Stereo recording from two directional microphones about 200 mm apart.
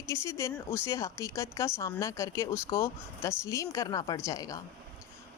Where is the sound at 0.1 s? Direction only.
15° left (ahead or behind).